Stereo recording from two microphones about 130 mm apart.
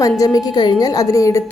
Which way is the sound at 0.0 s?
25° left (ahead or behind).